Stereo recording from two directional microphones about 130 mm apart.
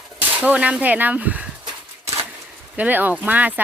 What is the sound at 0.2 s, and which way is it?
Speech, 10° right (ahead or behind).